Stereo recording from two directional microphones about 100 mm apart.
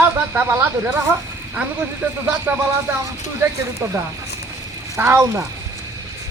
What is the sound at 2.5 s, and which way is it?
Speech, 15° right (ahead or behind).